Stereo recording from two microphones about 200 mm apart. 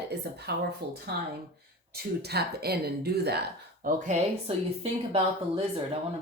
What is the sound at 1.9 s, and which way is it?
Speech, 50° right (ahead or behind).